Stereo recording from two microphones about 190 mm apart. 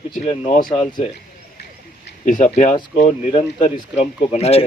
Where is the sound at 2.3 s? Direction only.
40° left (ahead or behind).